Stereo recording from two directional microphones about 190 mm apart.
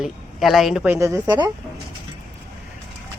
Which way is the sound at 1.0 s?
15° right (ahead or behind).